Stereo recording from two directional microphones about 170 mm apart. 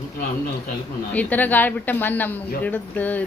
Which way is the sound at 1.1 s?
10° left (ahead or behind).